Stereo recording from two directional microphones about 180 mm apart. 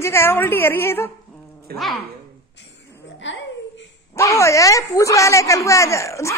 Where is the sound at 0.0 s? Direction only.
15° left (ahead or behind).